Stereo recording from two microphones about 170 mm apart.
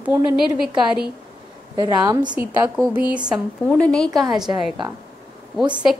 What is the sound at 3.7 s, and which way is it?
Speech, 5° left (ahead or behind).